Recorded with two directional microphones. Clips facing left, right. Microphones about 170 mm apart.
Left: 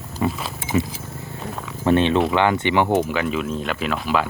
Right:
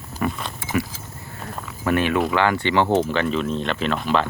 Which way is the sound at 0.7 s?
20° left (ahead or behind).